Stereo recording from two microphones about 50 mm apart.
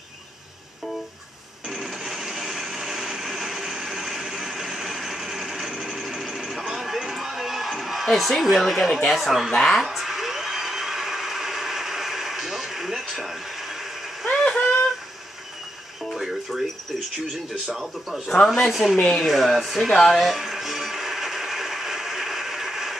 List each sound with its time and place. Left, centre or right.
1.7 s blender: centre
9.1 s speech: centre
9.5 s speech: centre
9.8 s a sound: centre
14.2 s a sound: centre
16.1 s music: centre
17.3 s speech: centre
20.1 s music: centre